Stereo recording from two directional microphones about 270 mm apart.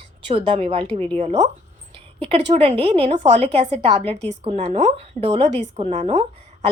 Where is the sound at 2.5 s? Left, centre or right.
Right.